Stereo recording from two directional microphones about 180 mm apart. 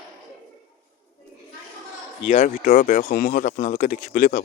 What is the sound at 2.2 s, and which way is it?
Speech, 45° left (ahead or behind).